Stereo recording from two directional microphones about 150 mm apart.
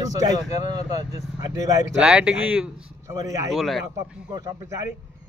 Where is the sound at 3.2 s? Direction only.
20° right (ahead or behind).